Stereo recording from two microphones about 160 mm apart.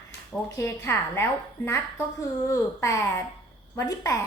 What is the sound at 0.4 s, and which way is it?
A woman's voice, 20° left (ahead or behind).